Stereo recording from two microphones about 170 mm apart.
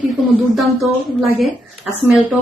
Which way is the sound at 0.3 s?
Centre (ahead or behind).